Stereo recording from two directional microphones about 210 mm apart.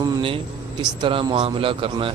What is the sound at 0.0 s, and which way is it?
Air conditioning, 20° right (ahead or behind).